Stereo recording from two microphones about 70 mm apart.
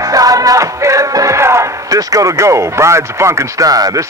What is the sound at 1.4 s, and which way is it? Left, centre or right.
Speech, right.